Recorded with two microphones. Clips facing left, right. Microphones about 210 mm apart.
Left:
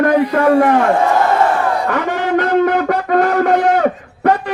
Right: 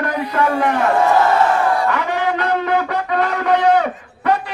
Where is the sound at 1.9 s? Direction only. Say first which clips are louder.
Left 2 dB; 50° left (ahead or behind).